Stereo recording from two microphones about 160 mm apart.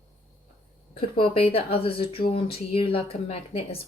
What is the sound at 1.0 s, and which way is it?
A woman's voice, 35° left (ahead or behind).